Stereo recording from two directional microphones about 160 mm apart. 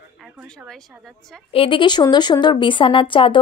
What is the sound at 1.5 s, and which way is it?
Speech, 35° left (ahead or behind).